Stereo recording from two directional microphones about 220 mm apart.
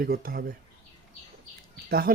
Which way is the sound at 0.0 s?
40° right (ahead or behind).